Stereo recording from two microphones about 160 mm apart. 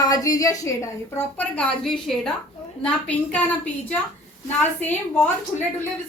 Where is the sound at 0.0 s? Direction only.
20° left (ahead or behind).